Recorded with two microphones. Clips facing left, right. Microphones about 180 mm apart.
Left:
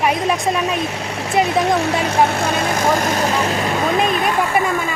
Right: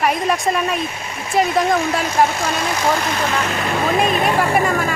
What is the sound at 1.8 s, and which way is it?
Speech, 65° left (ahead or behind).